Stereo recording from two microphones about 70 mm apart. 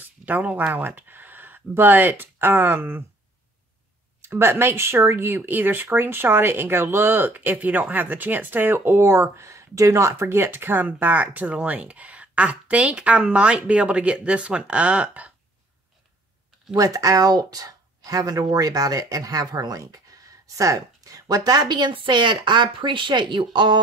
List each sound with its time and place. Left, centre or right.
0.2 s speech: right
4.2 s speech: right
16.7 s a woman's voice: right